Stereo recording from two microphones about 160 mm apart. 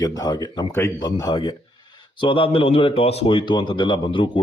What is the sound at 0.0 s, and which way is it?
Speech, 25° left (ahead or behind).